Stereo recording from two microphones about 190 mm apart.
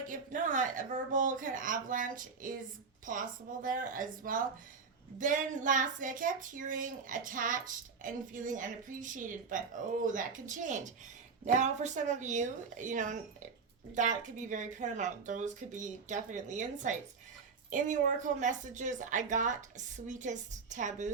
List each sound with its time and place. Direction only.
0.1 s a woman's voice: 40° right (ahead or behind)